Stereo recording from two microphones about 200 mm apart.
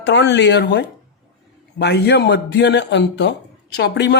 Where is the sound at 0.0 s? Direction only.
60° left (ahead or behind).